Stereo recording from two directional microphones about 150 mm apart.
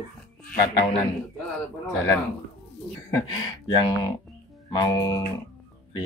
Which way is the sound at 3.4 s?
25° left (ahead or behind).